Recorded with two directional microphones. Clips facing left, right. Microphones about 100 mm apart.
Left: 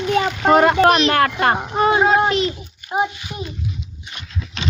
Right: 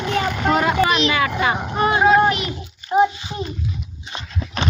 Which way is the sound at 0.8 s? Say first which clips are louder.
Left 4 dB; 65° left (ahead or behind).